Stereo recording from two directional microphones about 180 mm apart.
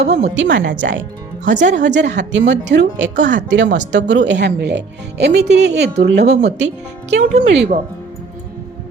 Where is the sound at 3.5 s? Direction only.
90° right; by 6.3 s 70° right (ahead or behind).